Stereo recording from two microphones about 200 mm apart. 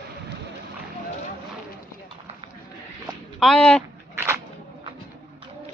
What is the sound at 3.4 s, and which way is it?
Speech, 5° left (ahead or behind).